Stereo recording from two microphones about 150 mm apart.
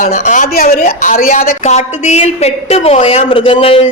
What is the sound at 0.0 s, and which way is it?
A woman's voice, 55° left (ahead or behind).